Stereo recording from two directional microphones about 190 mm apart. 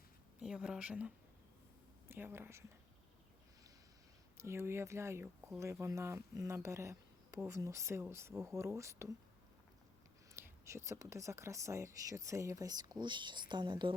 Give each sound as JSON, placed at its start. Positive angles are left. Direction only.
{"t": 0.4, "sound": "speech", "side_deg": -5}
{"t": 4.4, "sound": "speech", "side_deg": -15}
{"t": 10.3, "sound": "speech", "side_deg": -15}